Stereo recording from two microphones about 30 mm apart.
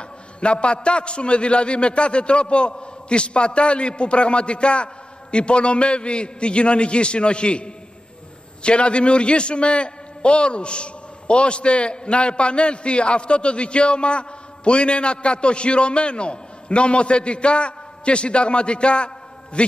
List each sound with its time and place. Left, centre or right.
0.4 s a man's voice: left